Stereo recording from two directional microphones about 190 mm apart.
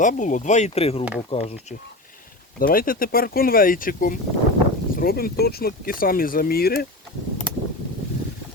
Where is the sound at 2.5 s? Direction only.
50° left (ahead or behind).